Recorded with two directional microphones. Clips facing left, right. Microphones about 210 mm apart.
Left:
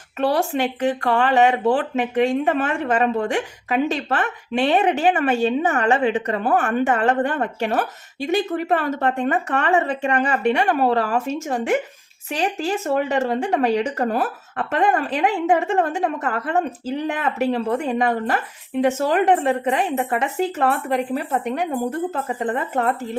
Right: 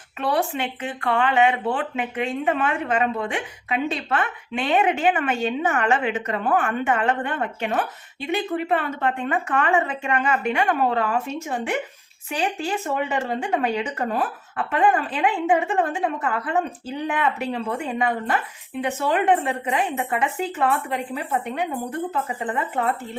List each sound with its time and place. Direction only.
0.2 s a woman's voice: 40° left (ahead or behind)